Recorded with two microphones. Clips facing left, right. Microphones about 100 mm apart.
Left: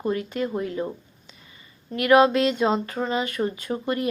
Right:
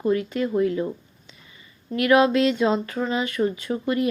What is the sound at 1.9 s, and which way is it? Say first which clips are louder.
Speech: even; 35° left (ahead or behind).